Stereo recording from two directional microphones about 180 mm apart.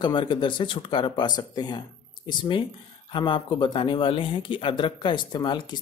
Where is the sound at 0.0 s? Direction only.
25° left (ahead or behind).